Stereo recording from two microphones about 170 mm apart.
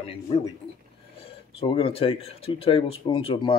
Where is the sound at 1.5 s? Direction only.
30° left (ahead or behind).